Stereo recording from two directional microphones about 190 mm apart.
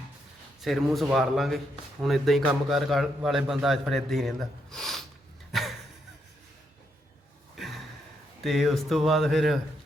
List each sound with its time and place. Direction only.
0.6 s a man's voice: centre (ahead or behind)
5.5 s a sound: centre (ahead or behind)
8.4 s a man's voice: centre (ahead or behind)